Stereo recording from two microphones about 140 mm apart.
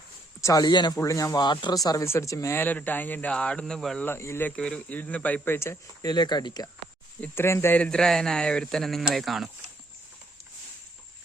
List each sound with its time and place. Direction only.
0.4 s speech: 30° left (ahead or behind); by 4.0 s 5° left (ahead or behind)
4.0 s speech: 20° left (ahead or behind)
7.2 s speech: 15° left (ahead or behind); by 9.5 s centre (ahead or behind)